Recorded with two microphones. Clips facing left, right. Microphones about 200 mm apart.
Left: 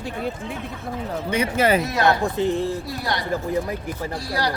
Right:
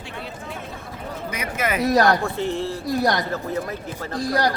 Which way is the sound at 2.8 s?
45° right (ahead or behind).